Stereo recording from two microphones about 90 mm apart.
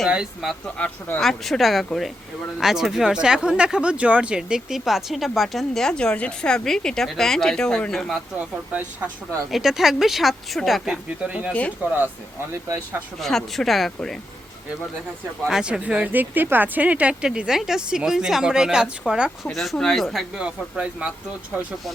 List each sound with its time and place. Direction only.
0.4 s speech: centre (ahead or behind)
0.8 s speech: 20° left (ahead or behind)
1.2 s speech: centre (ahead or behind)
8.4 s speech: 15° right (ahead or behind)
12.6 s speech: 25° right (ahead or behind)
13.1 s speech: 5° left (ahead or behind)
15.4 s speech: 5° right (ahead or behind)
19.5 s speech: 5° left (ahead or behind)
20.4 s speech: 10° right (ahead or behind)